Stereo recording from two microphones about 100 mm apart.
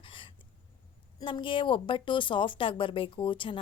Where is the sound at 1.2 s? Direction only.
55° left (ahead or behind).